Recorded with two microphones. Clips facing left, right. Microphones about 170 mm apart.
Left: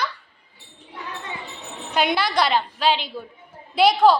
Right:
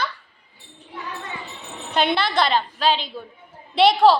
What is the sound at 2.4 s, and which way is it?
Speech, 15° left (ahead or behind).